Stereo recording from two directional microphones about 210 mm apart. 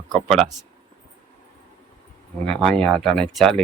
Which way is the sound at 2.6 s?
5° left (ahead or behind).